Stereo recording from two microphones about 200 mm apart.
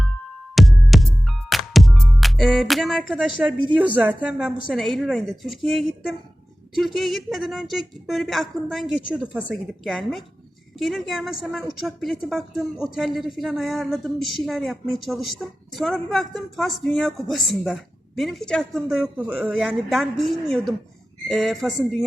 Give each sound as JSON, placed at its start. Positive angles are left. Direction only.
{"t": 0.5, "sound": "music", "side_deg": 0}
{"t": 3.8, "sound": "a woman's voice", "side_deg": -5}